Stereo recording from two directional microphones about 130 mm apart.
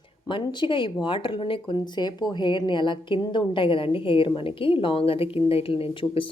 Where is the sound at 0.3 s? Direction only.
40° left (ahead or behind).